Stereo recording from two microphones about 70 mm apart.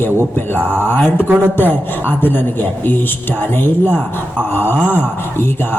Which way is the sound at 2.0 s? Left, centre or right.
Left.